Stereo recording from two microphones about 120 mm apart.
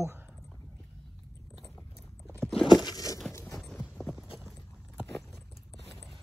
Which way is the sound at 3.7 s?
10° left (ahead or behind).